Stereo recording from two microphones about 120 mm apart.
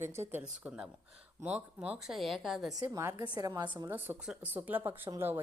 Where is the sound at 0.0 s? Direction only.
20° right (ahead or behind); by 2.7 s centre (ahead or behind).